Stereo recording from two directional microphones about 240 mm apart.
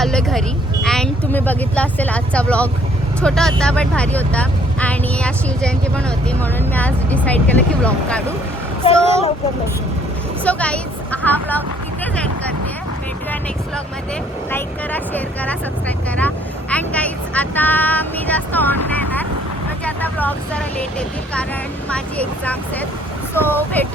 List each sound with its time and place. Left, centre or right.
0.0 s vehicle: centre
0.9 s speech: centre
8.8 s a child's voice: left
10.4 s a woman's voice: centre
14.5 s speech: centre
21.8 s speech: centre